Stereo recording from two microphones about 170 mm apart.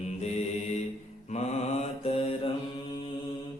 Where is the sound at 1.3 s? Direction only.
40° left (ahead or behind).